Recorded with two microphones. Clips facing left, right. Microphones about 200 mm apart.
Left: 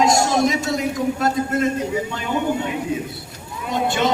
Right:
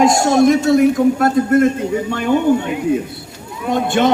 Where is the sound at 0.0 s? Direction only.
55° right (ahead or behind).